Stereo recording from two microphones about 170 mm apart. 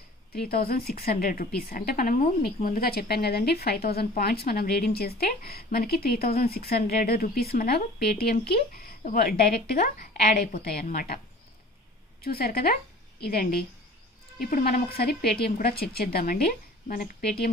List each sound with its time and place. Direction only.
0.3 s a woman's voice: 65° left (ahead or behind)
12.2 s a woman's voice: 60° left (ahead or behind)